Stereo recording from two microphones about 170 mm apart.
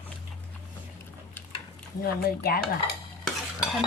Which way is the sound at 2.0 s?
65° left (ahead or behind).